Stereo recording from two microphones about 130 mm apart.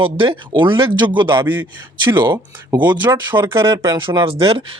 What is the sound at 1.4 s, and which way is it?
Speech, 15° right (ahead or behind).